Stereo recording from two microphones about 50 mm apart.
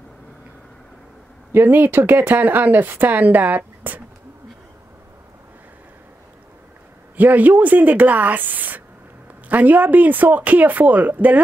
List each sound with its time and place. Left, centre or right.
1.5 s speech: right
7.2 s speech: right